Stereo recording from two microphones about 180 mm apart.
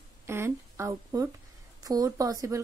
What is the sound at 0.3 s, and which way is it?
A woman's voice, 15° right (ahead or behind).